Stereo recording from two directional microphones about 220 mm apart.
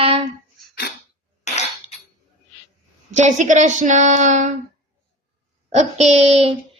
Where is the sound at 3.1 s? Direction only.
35° right (ahead or behind).